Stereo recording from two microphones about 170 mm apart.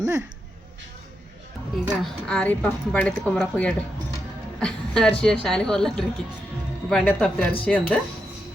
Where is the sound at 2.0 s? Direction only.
5° left (ahead or behind).